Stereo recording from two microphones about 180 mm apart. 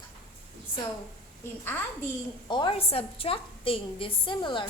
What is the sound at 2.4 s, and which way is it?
A woman's voice, 25° left (ahead or behind).